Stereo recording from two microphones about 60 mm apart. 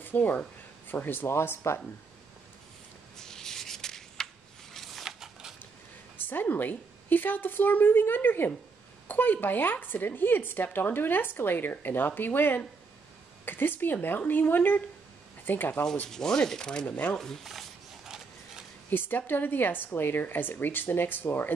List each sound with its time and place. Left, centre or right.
0.0 s speech: left
3.2 s a sound: centre
4.7 s a sound: centre
6.2 s speech: left
16.1 s speech: centre
16.8 s speech: left
17.2 s speech: centre
17.5 s a sound: centre
18.9 s speech: left